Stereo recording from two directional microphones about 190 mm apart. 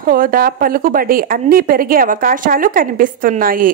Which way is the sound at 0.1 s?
50° right (ahead or behind).